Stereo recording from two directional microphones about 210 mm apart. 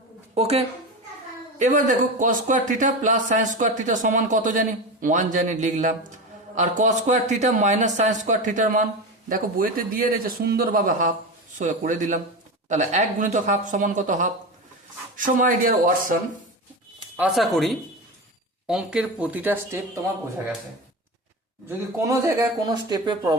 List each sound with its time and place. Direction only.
0.3 s speech: 30° right (ahead or behind)
17.2 s speech: centre (ahead or behind)
21.7 s speech: 10° right (ahead or behind)